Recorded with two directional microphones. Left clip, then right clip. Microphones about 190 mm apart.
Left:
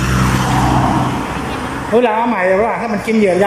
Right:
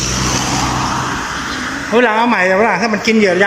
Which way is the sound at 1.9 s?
15° left (ahead or behind).